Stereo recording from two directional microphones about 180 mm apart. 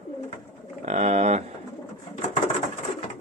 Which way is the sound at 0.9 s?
40° right (ahead or behind).